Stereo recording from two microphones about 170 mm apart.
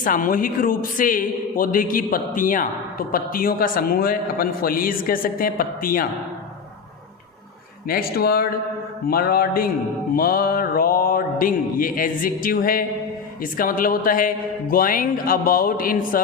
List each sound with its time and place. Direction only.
0.0 s a man's voice: 55° left (ahead or behind)
7.9 s a man's voice: 60° left (ahead or behind)